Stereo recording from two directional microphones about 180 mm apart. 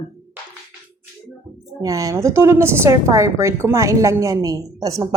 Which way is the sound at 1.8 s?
20° right (ahead or behind).